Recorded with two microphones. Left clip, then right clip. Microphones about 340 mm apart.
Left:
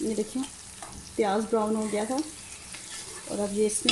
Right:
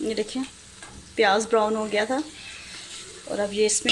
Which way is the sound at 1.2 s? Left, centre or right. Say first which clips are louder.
Right 6 dB; right.